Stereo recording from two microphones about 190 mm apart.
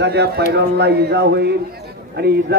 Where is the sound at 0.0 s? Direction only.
60° right (ahead or behind).